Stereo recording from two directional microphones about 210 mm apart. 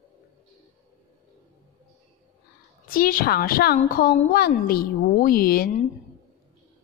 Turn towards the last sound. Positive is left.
turn(degrees=45)  # may be behind; listen again after turning